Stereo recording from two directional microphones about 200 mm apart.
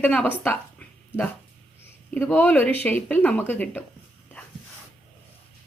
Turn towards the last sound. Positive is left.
turn(degrees=10)  # may be behind; listen again after turning